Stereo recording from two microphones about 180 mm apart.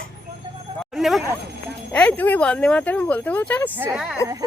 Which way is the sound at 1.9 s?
5° left (ahead or behind).